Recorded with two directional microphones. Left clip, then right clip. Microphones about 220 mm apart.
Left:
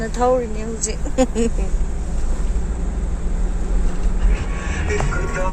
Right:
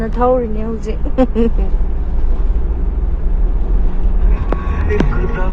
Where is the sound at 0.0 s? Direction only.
10° left (ahead or behind).